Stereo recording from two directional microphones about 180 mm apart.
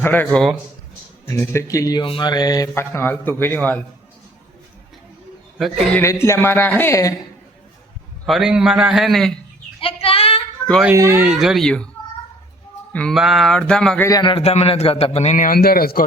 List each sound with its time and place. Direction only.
0.0 s speech: 10° left (ahead or behind)
0.3 s speech: centre (ahead or behind)
1.2 s speech: 15° left (ahead or behind)
5.9 s speech: 15° left (ahead or behind)
8.3 s speech: 5° right (ahead or behind)
9.8 s child singing: 30° left (ahead or behind)
10.8 s speech: 15° right (ahead or behind); by 11.9 s 5° left (ahead or behind)
12.9 s speech: 5° left (ahead or behind)
14.1 s a man's voice: 25° left (ahead or behind); by 16.0 s 55° left (ahead or behind)